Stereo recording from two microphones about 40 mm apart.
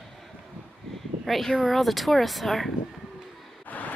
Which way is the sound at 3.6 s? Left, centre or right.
Left.